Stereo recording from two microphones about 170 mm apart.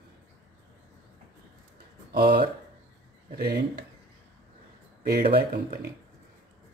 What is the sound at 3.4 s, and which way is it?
Speech, 65° right (ahead or behind).